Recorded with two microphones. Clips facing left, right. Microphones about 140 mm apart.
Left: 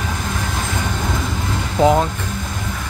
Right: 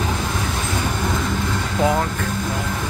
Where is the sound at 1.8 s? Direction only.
20° left (ahead or behind).